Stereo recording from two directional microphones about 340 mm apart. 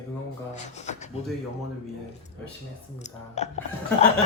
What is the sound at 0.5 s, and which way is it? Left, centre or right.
Speech, centre.